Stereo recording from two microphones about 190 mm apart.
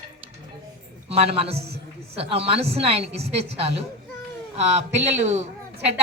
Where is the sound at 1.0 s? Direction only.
30° right (ahead or behind).